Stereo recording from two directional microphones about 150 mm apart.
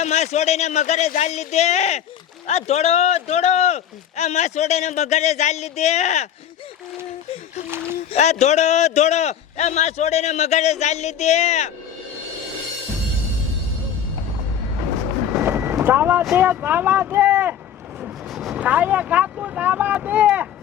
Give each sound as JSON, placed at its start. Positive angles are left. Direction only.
{"t": 0.0, "sound": "speech", "side_deg": 50}
{"t": 8.1, "sound": "speech", "side_deg": 50}
{"t": 15.3, "sound": "boat", "side_deg": -15}
{"t": 16.3, "sound": "speech", "side_deg": -15}